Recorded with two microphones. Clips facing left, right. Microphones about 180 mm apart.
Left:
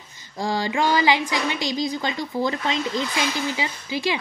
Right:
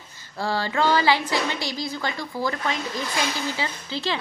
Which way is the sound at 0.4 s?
15° left (ahead or behind).